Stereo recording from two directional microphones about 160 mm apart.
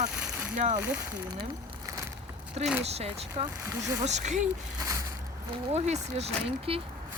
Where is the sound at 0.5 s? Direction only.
50° right (ahead or behind).